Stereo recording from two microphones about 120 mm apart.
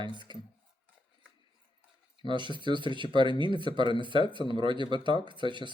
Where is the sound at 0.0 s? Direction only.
40° right (ahead or behind).